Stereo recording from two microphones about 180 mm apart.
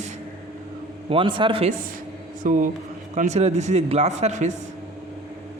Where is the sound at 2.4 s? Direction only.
45° right (ahead or behind).